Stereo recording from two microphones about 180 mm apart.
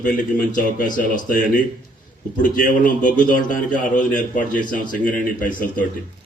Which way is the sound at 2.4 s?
50° left (ahead or behind).